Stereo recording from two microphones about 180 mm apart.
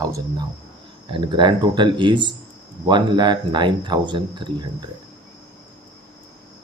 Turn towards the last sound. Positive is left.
turn(degrees=-25)  # may be behind; listen again after turning